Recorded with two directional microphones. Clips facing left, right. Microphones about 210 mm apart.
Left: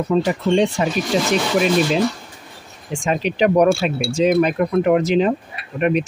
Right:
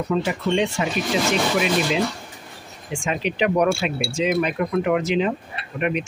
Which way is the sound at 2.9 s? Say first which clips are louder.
Left 4 dB; 40° left (ahead or behind).